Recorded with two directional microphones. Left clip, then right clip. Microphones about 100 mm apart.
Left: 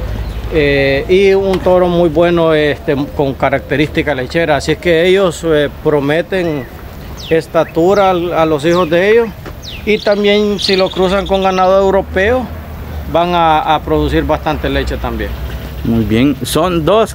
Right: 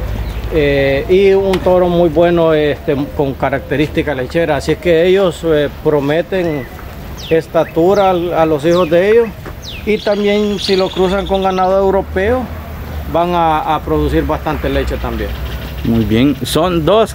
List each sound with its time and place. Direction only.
0.6 s a sound: 30° left (ahead or behind)
1.7 s speech: 25° left (ahead or behind)
16.1 s speech: 5° left (ahead or behind)